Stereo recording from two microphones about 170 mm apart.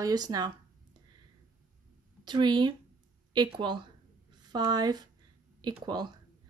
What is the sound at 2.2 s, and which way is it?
Speech, 25° right (ahead or behind).